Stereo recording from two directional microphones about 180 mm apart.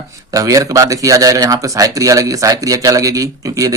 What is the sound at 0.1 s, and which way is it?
Speech, 20° right (ahead or behind).